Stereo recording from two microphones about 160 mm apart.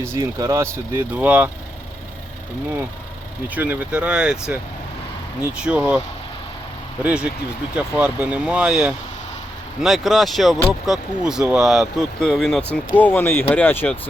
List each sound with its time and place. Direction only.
0.0 s speech: 15° right (ahead or behind)
3.5 s speech: 10° right (ahead or behind)
7.0 s speech: 5° right (ahead or behind); by 14.0 s 10° left (ahead or behind)